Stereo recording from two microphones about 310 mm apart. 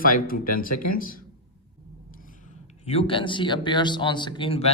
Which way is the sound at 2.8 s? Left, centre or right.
Centre.